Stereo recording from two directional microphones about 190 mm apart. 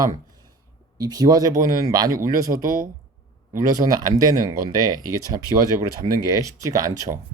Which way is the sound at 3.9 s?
20° right (ahead or behind).